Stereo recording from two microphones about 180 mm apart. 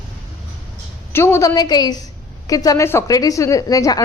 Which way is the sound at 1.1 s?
15° left (ahead or behind).